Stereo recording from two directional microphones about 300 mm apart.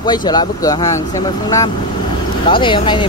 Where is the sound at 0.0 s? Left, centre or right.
Centre.